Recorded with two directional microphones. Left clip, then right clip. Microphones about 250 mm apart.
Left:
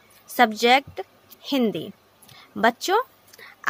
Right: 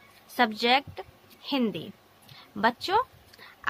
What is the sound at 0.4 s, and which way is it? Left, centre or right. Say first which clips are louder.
A woman's voice: left 6 dB; left.